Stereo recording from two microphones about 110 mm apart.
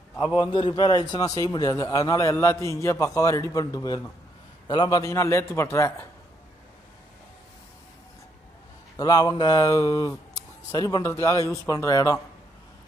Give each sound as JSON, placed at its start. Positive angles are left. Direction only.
{"t": 0.4, "sound": "a man's voice", "side_deg": 45}
{"t": 8.9, "sound": "a man's voice", "side_deg": 35}